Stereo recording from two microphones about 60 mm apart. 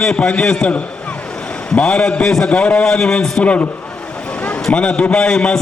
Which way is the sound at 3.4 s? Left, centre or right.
Left.